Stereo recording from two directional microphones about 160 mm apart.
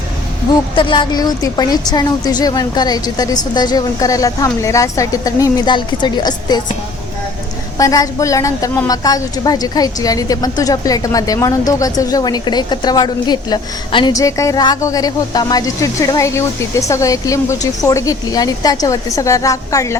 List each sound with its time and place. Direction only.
0.8 s a woman's voice: 30° left (ahead or behind)
7.8 s a woman's voice: 20° left (ahead or behind)